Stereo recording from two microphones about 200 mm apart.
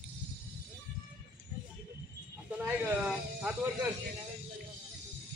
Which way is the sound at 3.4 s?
10° right (ahead or behind).